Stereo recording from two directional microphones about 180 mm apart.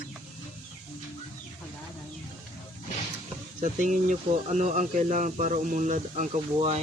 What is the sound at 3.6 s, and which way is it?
Speech, 40° right (ahead or behind).